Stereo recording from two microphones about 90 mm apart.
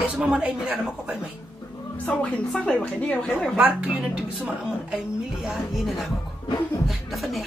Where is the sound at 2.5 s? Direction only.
10° left (ahead or behind).